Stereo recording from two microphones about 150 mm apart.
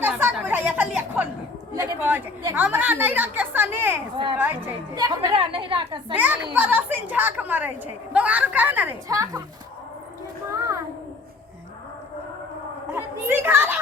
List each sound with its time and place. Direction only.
0.0 s chatter: 15° right (ahead or behind)
2.0 s a woman's voice: 10° right (ahead or behind)
4.9 s a woman's voice: 25° right (ahead or behind)
5.3 s a woman's voice: 35° right (ahead or behind)
6.1 s a woman's voice: 10° right (ahead or behind)
9.0 s a woman's voice: 25° right (ahead or behind)
10.5 s child singing: 20° right (ahead or behind)
12.9 s a woman's voice: 15° right (ahead or behind)